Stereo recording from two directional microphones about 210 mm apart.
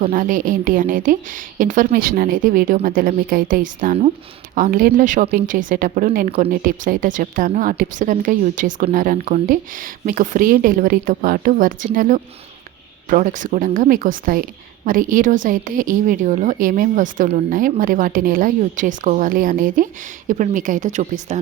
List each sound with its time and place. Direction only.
0.1 s speech: 40° right (ahead or behind)